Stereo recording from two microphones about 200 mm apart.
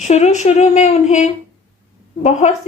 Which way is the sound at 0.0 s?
35° left (ahead or behind).